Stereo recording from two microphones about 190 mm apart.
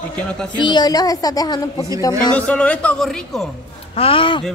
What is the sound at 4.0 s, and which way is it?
Speech, 30° left (ahead or behind).